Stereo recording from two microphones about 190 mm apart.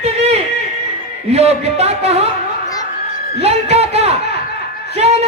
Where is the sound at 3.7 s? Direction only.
35° right (ahead or behind).